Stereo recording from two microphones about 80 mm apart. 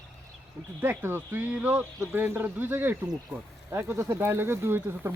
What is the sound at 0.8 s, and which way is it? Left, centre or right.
Speech, right.